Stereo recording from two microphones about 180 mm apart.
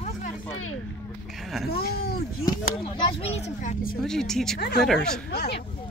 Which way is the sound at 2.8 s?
30° left (ahead or behind).